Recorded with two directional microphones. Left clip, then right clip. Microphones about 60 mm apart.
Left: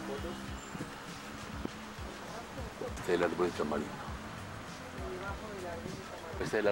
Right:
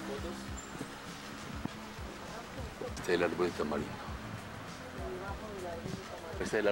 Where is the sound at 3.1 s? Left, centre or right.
Left.